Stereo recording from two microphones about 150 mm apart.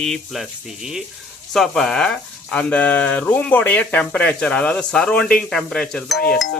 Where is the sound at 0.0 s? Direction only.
Centre (ahead or behind).